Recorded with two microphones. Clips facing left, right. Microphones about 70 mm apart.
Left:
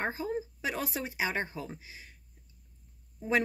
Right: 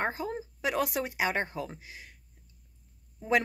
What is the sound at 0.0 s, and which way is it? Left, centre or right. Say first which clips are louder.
A woman's voice: right 1 dB; right.